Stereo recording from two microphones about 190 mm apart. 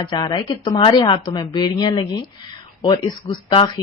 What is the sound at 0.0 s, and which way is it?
Speech, 25° left (ahead or behind).